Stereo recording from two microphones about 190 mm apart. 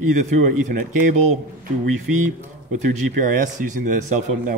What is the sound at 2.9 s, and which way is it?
Speech, 45° right (ahead or behind).